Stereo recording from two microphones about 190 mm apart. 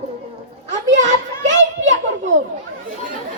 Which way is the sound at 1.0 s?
40° right (ahead or behind).